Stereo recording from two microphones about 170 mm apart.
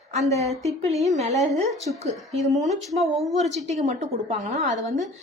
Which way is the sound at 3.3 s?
40° right (ahead or behind).